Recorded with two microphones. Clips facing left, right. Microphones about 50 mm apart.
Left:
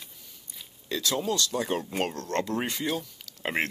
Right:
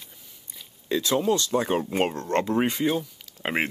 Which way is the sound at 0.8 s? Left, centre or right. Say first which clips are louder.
Right 6 dB; right.